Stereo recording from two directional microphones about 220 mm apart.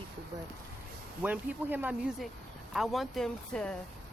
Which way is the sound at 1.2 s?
10° right (ahead or behind).